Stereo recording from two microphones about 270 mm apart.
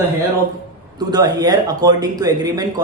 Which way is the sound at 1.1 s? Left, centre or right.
Centre.